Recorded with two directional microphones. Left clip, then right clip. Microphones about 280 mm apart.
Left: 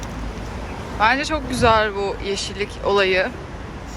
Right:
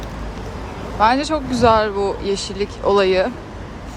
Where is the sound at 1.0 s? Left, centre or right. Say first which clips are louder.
Right 2 dB; centre.